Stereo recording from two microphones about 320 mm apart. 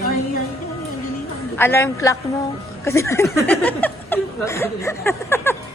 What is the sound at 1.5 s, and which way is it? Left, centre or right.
Speech, centre.